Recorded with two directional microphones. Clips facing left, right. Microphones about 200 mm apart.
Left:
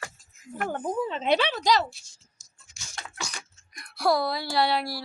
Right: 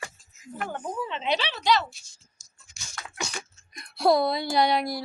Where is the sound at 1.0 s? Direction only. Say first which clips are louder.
Left 3 dB; 40° left (ahead or behind).